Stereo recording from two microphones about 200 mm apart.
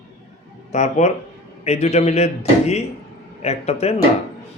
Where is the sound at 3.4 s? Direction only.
30° left (ahead or behind).